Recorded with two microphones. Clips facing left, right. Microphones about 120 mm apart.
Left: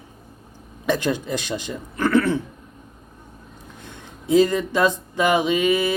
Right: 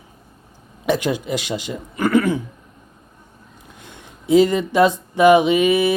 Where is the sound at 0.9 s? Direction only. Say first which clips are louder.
Right 2 dB; 15° right (ahead or behind).